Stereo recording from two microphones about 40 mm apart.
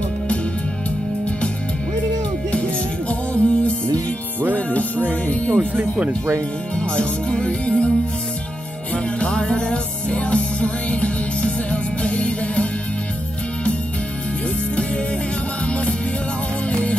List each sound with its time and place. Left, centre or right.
2.5 s music: left
7.0 s music: left
9.3 s music: left
16.6 s music: left